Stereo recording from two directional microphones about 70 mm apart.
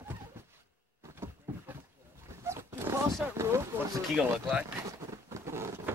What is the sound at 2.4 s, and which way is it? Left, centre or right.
Zipper, right.